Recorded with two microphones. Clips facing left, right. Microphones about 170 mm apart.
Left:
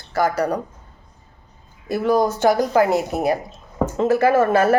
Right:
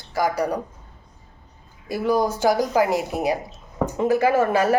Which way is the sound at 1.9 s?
10° right (ahead or behind).